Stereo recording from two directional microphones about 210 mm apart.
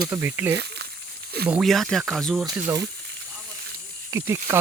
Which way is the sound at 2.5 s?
15° right (ahead or behind).